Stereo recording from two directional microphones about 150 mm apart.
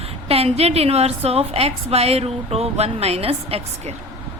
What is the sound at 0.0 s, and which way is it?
A woman's voice, 40° right (ahead or behind).